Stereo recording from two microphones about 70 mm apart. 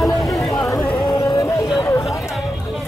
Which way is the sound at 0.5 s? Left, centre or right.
Left.